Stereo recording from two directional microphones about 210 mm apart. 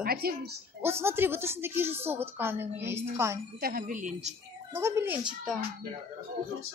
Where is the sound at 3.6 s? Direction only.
45° right (ahead or behind).